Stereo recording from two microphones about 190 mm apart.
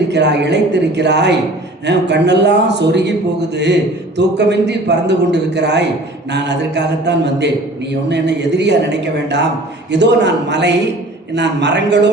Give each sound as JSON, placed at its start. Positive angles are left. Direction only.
{"t": 0.1, "sound": "a man's voice", "side_deg": -65}